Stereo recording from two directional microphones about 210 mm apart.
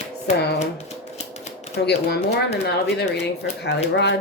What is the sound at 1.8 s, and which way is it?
Speech, 50° left (ahead or behind).